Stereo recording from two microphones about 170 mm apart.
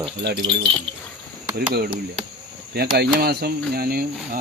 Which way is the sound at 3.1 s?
65° right (ahead or behind).